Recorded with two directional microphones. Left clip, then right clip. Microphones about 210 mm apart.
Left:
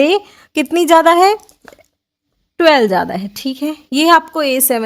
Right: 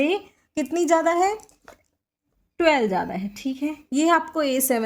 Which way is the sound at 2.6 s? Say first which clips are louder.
Left 9 dB; 45° left (ahead or behind).